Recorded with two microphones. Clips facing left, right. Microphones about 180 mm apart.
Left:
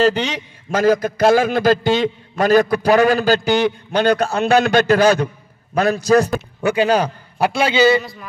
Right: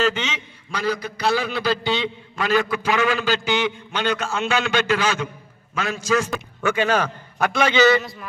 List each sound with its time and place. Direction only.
0.0 s a man's voice: 40° left (ahead or behind)